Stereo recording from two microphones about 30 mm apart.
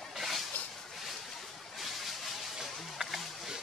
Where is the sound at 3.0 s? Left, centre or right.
Centre.